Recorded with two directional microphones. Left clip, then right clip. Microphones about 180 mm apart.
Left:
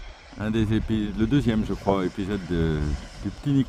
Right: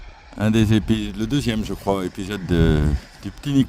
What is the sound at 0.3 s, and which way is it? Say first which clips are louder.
Speech: right 6 dB; 50° right (ahead or behind).